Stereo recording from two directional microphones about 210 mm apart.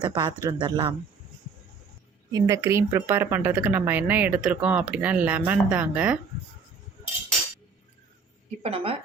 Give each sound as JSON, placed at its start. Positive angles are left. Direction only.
{"t": 0.0, "sound": "speech", "side_deg": -20}
{"t": 2.3, "sound": "speech", "side_deg": -15}
{"t": 8.6, "sound": "speech", "side_deg": -30}